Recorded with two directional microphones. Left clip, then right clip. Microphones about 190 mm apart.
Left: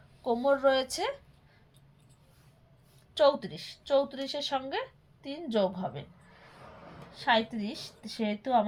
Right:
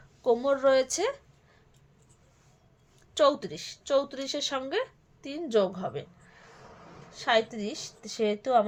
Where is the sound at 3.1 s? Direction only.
50° right (ahead or behind).